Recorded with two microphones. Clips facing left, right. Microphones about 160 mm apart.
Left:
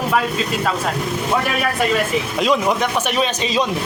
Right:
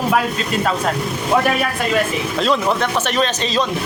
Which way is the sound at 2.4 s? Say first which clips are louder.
Even; 10° left (ahead or behind).